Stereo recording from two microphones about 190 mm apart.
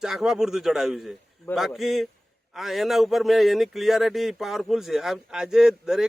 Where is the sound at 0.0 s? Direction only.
Centre (ahead or behind).